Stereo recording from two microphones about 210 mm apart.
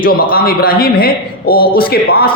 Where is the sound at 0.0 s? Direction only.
45° left (ahead or behind).